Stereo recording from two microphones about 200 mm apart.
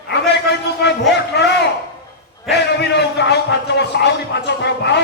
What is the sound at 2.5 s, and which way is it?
A man's voice, 55° left (ahead or behind).